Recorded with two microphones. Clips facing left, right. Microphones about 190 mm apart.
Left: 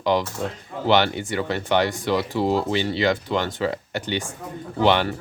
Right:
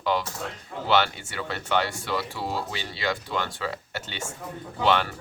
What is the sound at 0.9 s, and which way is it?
Speech, 20° left (ahead or behind).